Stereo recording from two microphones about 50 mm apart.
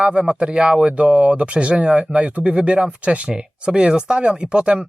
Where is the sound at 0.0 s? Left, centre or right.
Centre.